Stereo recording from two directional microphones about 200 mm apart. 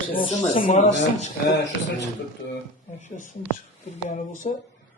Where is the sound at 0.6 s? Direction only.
35° left (ahead or behind).